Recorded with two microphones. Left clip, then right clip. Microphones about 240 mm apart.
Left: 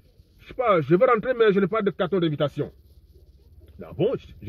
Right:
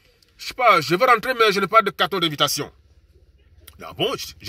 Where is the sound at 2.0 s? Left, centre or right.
Right.